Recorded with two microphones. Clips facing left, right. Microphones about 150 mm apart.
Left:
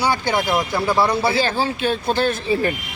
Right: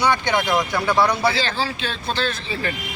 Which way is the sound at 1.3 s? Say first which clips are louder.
Left 4 dB; 50° left (ahead or behind).